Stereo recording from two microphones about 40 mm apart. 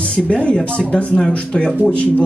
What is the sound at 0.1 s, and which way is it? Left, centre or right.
A man's voice, left.